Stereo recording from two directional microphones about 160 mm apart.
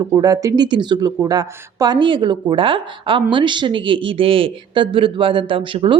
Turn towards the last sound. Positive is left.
turn(degrees=-35)  # may be behind; listen again after turning